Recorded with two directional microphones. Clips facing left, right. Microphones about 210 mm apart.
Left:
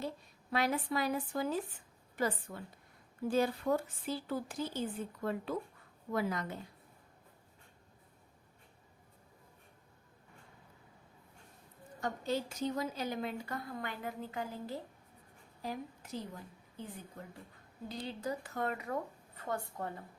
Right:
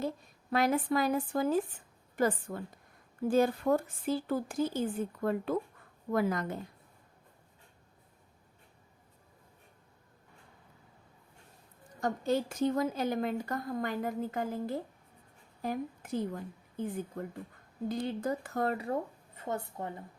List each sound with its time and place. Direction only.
0.5 s a woman's voice: 50° right (ahead or behind)
11.9 s a woman's voice: 45° right (ahead or behind); by 19.9 s 20° right (ahead or behind)